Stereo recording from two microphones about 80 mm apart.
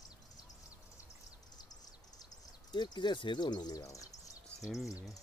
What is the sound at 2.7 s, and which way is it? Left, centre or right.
Speech, left.